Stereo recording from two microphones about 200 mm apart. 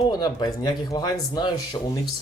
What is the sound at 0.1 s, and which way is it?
Speech, 20° left (ahead or behind).